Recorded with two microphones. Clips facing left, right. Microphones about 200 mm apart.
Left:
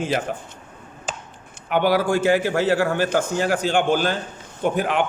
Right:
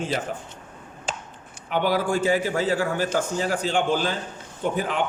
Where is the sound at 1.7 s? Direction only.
70° left (ahead or behind).